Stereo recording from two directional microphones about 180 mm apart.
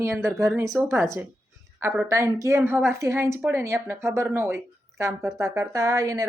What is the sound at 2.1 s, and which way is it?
Speech, 15° right (ahead or behind).